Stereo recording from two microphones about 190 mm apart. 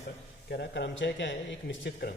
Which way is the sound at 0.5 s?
65° left (ahead or behind).